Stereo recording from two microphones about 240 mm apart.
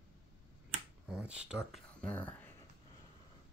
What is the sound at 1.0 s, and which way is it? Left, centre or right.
Speech, centre.